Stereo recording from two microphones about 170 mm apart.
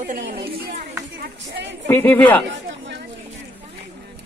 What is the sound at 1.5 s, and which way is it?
Speech, 90° right.